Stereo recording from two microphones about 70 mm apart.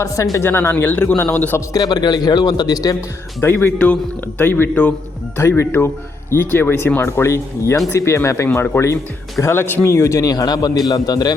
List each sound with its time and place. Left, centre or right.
0.4 s speech: left
1.7 s a man's voice: left
3.4 s speech: left
5.4 s speech: left
9.4 s speech: left
10.2 s a man's voice: left